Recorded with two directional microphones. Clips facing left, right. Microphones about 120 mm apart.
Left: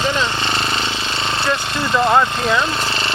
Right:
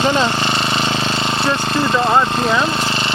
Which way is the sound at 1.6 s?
35° right (ahead or behind).